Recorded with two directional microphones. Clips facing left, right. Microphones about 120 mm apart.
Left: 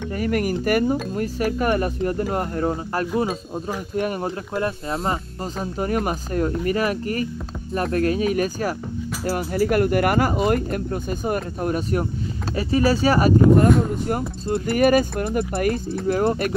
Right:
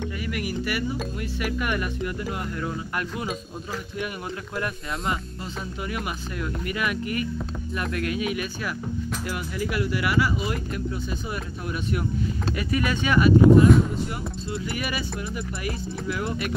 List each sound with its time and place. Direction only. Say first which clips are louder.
0.1 s speech: left 8 dB; 45° left (ahead or behind)
4.6 s speech: left 6 dB; 30° left (ahead or behind)